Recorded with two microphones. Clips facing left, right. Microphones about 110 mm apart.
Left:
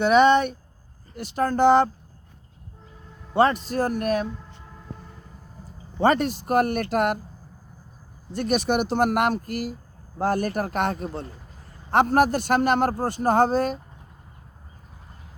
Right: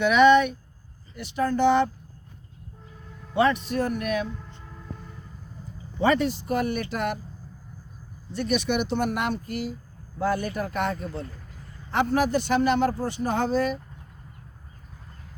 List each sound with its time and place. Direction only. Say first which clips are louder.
0.0 s a man's voice: even; 35° left (ahead or behind)
1.1 s a man's voice: left 1 dB; 45° left (ahead or behind)
3.3 s a man's voice: left 2 dB; 40° left (ahead or behind)
6.0 s a man's voice: left 2 dB; 45° left (ahead or behind)
8.3 s a man's voice: left 2 dB; 45° left (ahead or behind)